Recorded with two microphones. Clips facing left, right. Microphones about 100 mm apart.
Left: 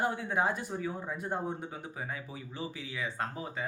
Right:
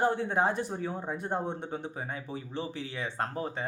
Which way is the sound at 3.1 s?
45° right (ahead or behind).